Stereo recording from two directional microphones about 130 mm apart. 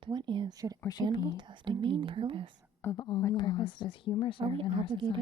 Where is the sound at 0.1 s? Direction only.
35° right (ahead or behind).